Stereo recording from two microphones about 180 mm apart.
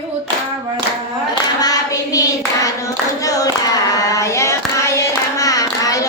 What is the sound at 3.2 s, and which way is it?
Child singing, 20° left (ahead or behind).